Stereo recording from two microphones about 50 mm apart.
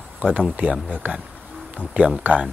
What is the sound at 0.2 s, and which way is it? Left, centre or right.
Speech, right.